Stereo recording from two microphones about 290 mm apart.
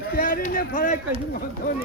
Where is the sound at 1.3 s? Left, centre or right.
Left.